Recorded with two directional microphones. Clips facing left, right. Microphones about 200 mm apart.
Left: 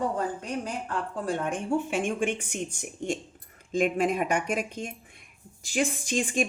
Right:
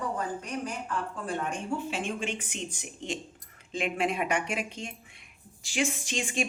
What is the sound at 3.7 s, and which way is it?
A woman's voice, 45° left (ahead or behind).